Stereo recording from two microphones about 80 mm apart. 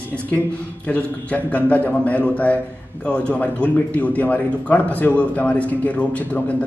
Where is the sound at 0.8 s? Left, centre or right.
Centre.